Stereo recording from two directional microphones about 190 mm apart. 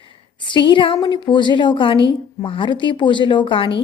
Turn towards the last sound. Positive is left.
turn(degrees=25)  # may be behind; listen again after turning